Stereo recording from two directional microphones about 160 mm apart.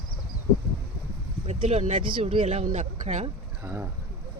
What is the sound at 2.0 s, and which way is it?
Speech, 35° right (ahead or behind).